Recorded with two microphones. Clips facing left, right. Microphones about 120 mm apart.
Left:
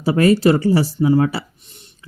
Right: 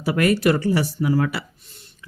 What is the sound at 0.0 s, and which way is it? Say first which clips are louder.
Speech: left 5 dB; 30° left (ahead or behind).